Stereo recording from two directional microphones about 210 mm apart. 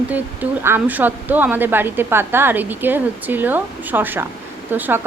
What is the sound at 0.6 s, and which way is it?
Speech, 10° right (ahead or behind).